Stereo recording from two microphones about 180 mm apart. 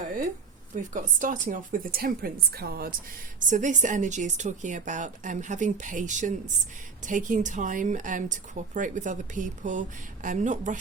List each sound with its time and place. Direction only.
0.8 s a woman's voice: 45° right (ahead or behind)
3.4 s a woman's voice: 45° right (ahead or behind)